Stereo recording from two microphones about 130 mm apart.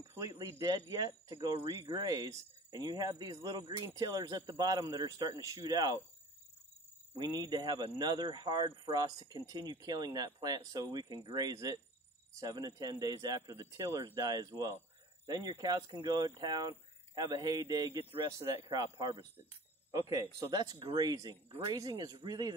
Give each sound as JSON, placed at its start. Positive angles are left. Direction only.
{"t": 0.1, "sound": "speech", "side_deg": -25}
{"t": 7.2, "sound": "speech", "side_deg": -30}